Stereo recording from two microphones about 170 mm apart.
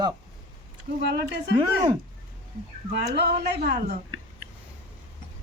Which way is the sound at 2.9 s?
75° right (ahead or behind).